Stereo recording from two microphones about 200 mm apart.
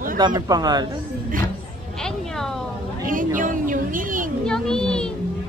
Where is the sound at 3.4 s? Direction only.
40° right (ahead or behind).